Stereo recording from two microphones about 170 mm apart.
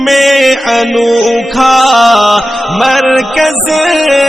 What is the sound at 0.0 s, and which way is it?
Music, centre (ahead or behind).